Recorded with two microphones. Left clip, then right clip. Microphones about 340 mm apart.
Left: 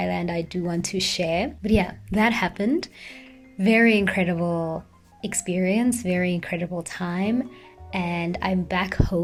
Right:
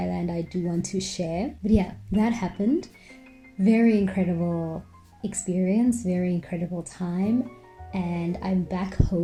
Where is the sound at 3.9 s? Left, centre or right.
Left.